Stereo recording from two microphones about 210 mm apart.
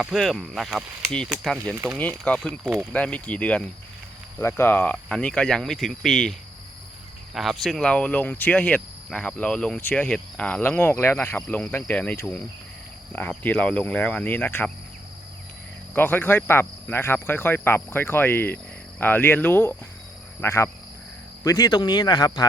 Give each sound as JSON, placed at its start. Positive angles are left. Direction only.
{"t": 0.0, "sound": "speech", "side_deg": 0}
{"t": 2.5, "sound": "speech", "side_deg": -10}
{"t": 2.9, "sound": "speech", "side_deg": 5}
{"t": 7.3, "sound": "speech", "side_deg": 0}
{"t": 16.0, "sound": "speech", "side_deg": 10}